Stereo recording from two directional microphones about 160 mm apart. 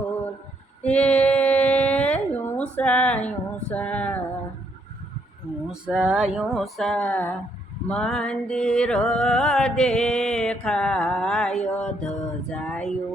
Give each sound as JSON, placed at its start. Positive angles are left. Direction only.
{"t": 0.8, "sound": "a sound", "side_deg": 10}
{"t": 5.8, "sound": "speech", "side_deg": -5}
{"t": 6.3, "sound": "music", "side_deg": 0}